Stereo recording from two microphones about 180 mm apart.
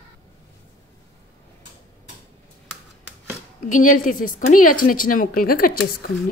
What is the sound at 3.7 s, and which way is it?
Speech, 45° left (ahead or behind).